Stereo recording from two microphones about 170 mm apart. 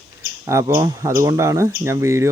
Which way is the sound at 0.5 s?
15° right (ahead or behind).